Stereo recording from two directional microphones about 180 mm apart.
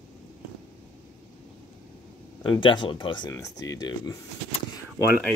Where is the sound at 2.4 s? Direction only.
25° left (ahead or behind).